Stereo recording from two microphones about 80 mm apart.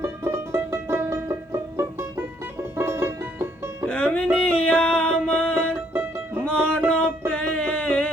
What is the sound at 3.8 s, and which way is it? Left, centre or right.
Music, centre.